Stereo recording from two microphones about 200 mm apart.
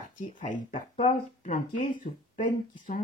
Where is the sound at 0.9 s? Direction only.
30° left (ahead or behind).